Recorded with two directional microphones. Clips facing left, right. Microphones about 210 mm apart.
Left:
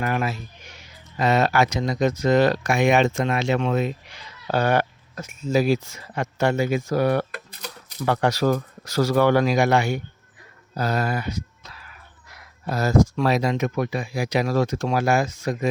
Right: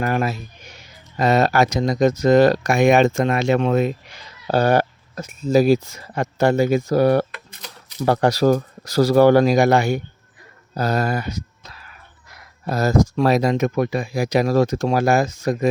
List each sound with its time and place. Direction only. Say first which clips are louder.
0.0 s speech: right 3 dB; 40° right (ahead or behind)
7.3 s speech: left 3 dB; 45° left (ahead or behind)
8.0 s speech: right 4 dB; 35° right (ahead or behind)